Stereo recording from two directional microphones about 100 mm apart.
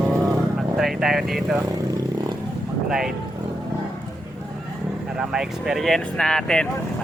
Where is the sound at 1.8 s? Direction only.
40° right (ahead or behind).